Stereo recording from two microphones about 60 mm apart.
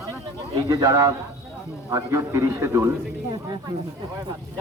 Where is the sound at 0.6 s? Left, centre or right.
Right.